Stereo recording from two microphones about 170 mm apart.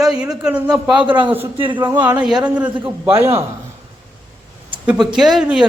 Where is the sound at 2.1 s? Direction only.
5° right (ahead or behind).